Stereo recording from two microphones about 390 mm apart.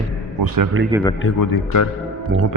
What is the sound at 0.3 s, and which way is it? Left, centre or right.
Speech, right.